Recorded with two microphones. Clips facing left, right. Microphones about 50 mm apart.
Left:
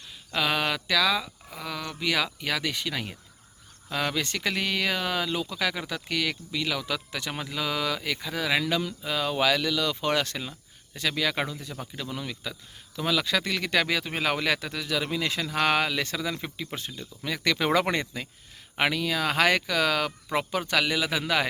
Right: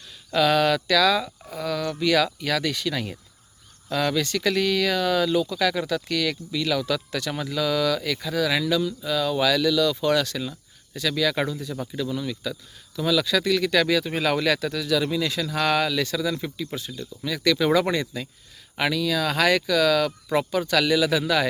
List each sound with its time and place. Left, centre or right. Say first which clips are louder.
0.3 s speech: right 7 dB; centre
8.7 s speech: right 5 dB; left
9.0 s speech: right 3 dB; left
16.7 s speech: right 4 dB; left